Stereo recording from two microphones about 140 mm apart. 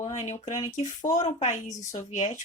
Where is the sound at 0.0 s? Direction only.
50° left (ahead or behind).